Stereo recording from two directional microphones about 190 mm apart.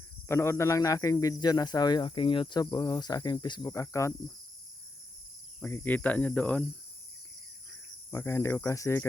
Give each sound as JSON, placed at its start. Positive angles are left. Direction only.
{"t": 0.3, "sound": "speech", "side_deg": 15}
{"t": 5.5, "sound": "speech", "side_deg": 10}
{"t": 8.1, "sound": "speech", "side_deg": 15}